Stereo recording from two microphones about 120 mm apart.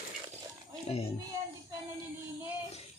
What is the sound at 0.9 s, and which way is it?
Speech, 55° left (ahead or behind).